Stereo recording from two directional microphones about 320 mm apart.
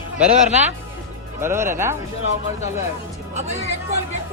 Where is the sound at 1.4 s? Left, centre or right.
Centre.